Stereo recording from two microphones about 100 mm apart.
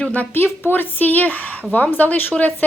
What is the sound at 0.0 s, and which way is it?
A woman's voice, 15° left (ahead or behind).